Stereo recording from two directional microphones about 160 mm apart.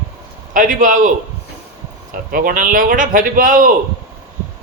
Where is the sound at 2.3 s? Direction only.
60° right (ahead or behind).